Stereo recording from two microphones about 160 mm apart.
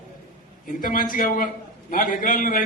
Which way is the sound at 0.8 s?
60° left (ahead or behind).